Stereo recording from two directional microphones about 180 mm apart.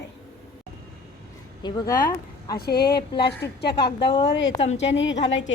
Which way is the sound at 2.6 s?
65° left (ahead or behind).